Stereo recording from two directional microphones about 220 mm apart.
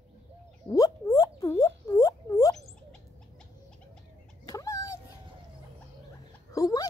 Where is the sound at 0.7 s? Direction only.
15° left (ahead or behind).